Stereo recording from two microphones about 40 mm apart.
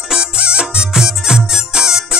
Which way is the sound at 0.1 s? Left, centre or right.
Right.